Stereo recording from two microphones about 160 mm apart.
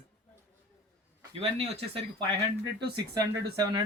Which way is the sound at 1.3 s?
35° right (ahead or behind).